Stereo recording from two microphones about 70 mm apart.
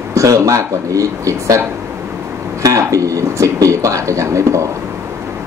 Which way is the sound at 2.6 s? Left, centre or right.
Right.